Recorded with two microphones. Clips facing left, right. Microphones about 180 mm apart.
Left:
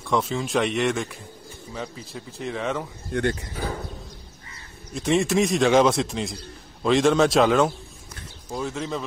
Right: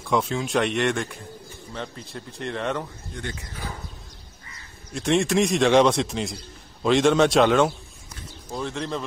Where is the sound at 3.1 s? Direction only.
60° left (ahead or behind).